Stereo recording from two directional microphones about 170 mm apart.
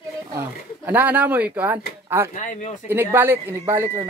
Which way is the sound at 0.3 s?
15° right (ahead or behind).